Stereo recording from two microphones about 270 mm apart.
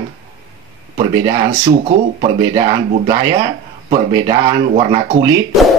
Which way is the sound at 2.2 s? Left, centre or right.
Centre.